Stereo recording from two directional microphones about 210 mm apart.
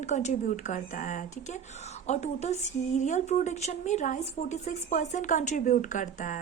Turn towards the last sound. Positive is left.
turn(degrees=35)  # may be behind; listen again after turning